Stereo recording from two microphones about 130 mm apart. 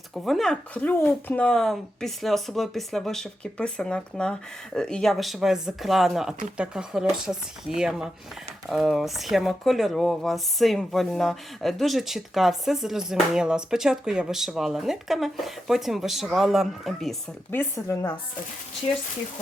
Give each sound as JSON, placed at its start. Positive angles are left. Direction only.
{"t": 0.1, "sound": "speech", "side_deg": 0}
{"t": 17.5, "sound": "speech", "side_deg": 15}